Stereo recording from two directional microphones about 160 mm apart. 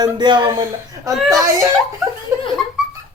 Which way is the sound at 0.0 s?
30° right (ahead or behind).